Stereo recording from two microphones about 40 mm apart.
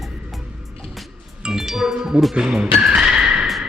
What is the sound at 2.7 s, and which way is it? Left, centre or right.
Vehicle, centre.